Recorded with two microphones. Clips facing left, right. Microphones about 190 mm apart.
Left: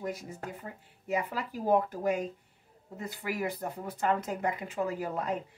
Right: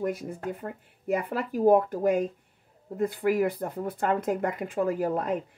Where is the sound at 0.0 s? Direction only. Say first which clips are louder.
Right 7 dB; 55° right (ahead or behind).